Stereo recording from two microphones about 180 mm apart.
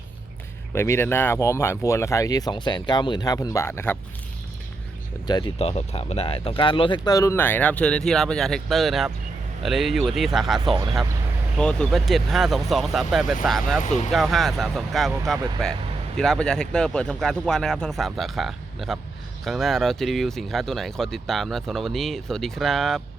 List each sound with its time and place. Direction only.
0.7 s speech: 15° left (ahead or behind)
5.2 s speech: 25° left (ahead or behind)
5.5 s speech: 35° left (ahead or behind); by 13.8 s centre (ahead or behind)
13.8 s speech: 40° left (ahead or behind)
14.1 s speech: centre (ahead or behind)